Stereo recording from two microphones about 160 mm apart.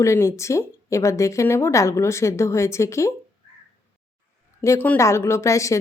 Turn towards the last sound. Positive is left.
turn(degrees=20)  # may be behind; listen again after turning